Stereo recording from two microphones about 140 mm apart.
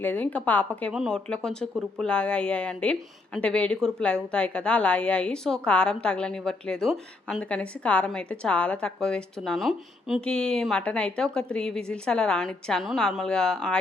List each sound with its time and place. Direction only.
0.0 s a woman's voice: 10° left (ahead or behind)